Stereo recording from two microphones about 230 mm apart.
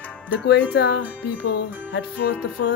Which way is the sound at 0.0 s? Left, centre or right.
Centre.